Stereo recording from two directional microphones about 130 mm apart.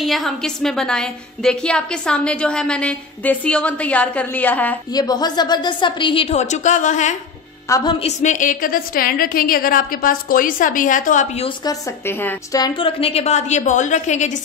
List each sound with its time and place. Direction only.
0.0 s a woman's voice: centre (ahead or behind)
4.9 s a woman's voice: 30° left (ahead or behind); by 7.2 s 70° left (ahead or behind)
7.6 s a woman's voice: 25° left (ahead or behind)
8.0 s a woman's voice: 65° left (ahead or behind); by 11.2 s 90° left
12.1 s a woman's voice: 15° left (ahead or behind)
12.5 s a woman's voice: 35° left (ahead or behind); by 14.4 s 65° left (ahead or behind)